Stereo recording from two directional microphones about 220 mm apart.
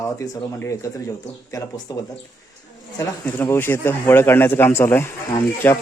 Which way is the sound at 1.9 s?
15° left (ahead or behind).